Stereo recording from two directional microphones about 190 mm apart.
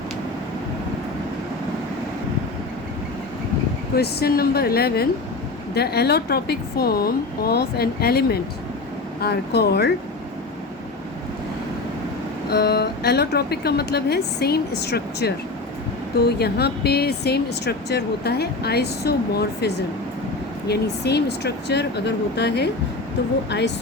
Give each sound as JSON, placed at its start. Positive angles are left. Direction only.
{"t": 3.9, "sound": "speech", "side_deg": 55}
{"t": 12.5, "sound": "speech", "side_deg": 55}